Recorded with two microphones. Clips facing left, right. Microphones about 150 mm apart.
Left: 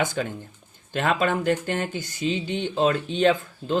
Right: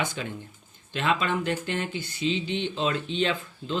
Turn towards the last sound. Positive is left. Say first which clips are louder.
# left 6 dB
turn(degrees=45)  # may be behind; listen again after turning